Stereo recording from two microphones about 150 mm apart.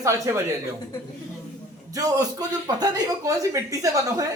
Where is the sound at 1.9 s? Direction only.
25° right (ahead or behind).